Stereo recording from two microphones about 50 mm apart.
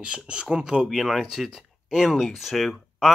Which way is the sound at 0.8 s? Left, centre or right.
Centre.